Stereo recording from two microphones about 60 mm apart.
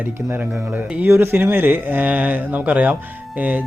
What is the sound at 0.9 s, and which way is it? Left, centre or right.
A man's voice, right.